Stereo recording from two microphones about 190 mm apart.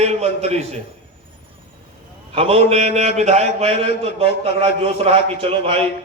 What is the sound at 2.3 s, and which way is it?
A man's voice, 30° right (ahead or behind).